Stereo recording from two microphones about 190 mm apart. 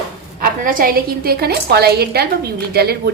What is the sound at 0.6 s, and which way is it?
Speech, 45° right (ahead or behind).